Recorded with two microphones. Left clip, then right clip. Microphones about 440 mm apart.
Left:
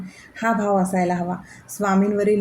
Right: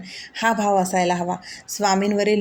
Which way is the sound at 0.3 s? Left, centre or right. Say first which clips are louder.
Right 1 dB; left.